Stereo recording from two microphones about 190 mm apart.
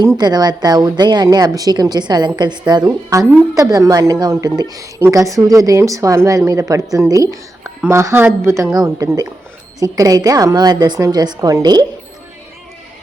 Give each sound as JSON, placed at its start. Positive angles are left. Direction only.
{"t": 0.0, "sound": "speech", "side_deg": -20}